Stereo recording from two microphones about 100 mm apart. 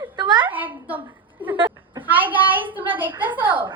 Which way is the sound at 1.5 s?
55° right (ahead or behind).